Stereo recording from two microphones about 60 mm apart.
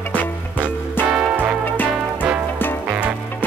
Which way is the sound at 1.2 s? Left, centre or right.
Right.